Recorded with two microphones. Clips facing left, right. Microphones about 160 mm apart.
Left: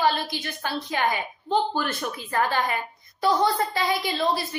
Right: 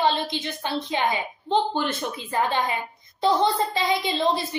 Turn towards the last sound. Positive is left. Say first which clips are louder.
# right 2 dB
turn(degrees=-20)  # may be behind; listen again after turning